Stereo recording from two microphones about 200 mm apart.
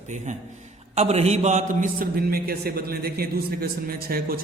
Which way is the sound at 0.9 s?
30° right (ahead or behind).